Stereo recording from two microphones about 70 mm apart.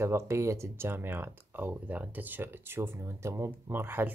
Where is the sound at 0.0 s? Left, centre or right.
Right.